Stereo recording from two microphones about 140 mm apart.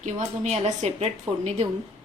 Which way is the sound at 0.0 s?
55° right (ahead or behind).